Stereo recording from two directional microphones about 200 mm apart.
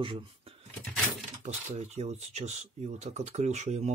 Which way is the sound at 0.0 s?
25° right (ahead or behind).